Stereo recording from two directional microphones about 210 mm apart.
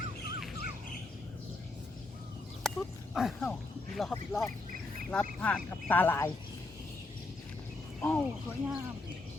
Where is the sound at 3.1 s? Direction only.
5° left (ahead or behind).